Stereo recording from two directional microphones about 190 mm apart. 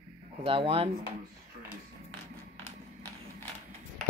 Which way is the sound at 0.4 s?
30° right (ahead or behind).